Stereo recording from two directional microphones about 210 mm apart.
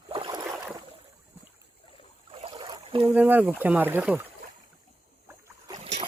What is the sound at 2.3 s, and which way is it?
Boat, 25° right (ahead or behind).